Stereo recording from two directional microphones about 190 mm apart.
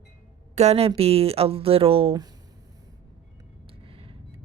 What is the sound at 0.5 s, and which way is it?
Speech, 35° right (ahead or behind).